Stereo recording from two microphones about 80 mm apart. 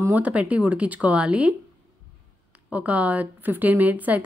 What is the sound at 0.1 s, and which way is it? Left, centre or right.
Speech, centre.